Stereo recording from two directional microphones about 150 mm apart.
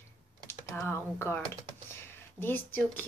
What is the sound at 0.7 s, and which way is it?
Speech, 20° left (ahead or behind).